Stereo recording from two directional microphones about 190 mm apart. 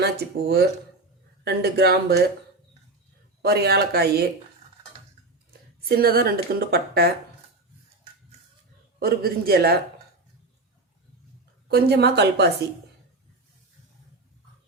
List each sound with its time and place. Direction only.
0.0 s speech: 60° right (ahead or behind)
3.4 s speech: 60° right (ahead or behind)
5.5 s speech: 55° right (ahead or behind)
9.0 s speech: 55° right (ahead or behind)
11.7 s speech: 55° right (ahead or behind)